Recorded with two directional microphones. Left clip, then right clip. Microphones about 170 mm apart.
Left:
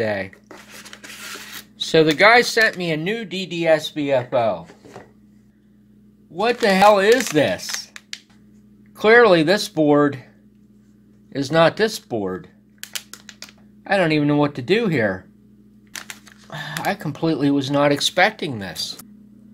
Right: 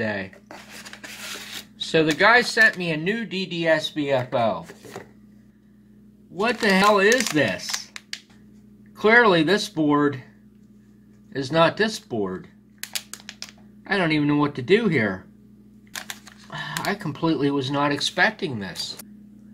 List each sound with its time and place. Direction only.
0.0 s speech: 50° left (ahead or behind)
0.5 s a sound: centre (ahead or behind)
1.8 s speech: 55° left (ahead or behind); by 4.6 s 35° left (ahead or behind)
4.9 s filing: 55° right (ahead or behind)
6.4 s speech: 50° left (ahead or behind)
8.1 s a sound: 5° right (ahead or behind)
8.9 s speech: 50° left (ahead or behind)
11.3 s speech: 50° left (ahead or behind)
12.8 s typing: 5° right (ahead or behind)
13.8 s speech: 45° left (ahead or behind)
15.9 s a sound: 5° right (ahead or behind)
16.4 s speech: 50° left (ahead or behind)